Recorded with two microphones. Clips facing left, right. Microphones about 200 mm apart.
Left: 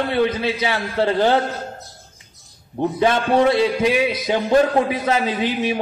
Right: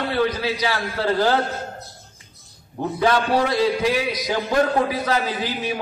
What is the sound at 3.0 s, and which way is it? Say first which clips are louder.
A man's voice: left 3 dB; 25° left (ahead or behind).